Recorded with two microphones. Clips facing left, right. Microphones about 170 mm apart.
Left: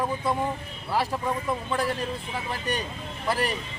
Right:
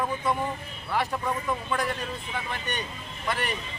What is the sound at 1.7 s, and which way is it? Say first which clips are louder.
Speech: left 2 dB; 30° left (ahead or behind).